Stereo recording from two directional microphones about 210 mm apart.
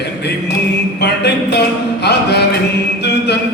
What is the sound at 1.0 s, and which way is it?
Mantra, 55° left (ahead or behind).